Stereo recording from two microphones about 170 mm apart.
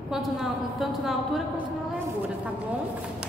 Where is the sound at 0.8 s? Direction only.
Centre (ahead or behind).